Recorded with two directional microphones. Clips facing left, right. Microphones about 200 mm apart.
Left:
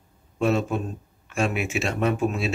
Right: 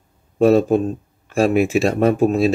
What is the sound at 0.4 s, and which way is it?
Speech, 35° right (ahead or behind).